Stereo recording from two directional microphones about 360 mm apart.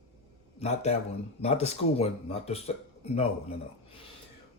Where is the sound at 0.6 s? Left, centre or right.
Centre.